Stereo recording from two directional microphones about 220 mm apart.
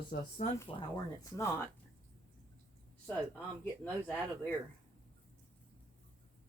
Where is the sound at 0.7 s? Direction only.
20° left (ahead or behind).